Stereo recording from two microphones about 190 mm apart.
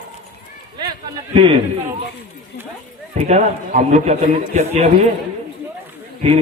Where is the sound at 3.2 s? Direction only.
40° right (ahead or behind).